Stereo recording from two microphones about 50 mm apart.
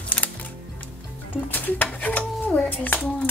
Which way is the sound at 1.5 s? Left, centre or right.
Left.